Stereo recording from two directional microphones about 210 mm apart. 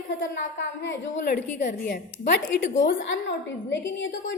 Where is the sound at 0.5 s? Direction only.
55° left (ahead or behind).